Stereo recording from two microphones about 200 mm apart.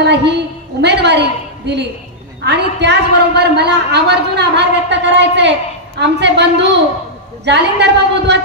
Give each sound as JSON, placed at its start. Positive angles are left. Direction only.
{"t": 0.0, "sound": "a woman's voice", "side_deg": -55}